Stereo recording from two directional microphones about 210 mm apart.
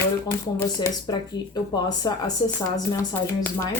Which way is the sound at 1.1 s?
20° left (ahead or behind).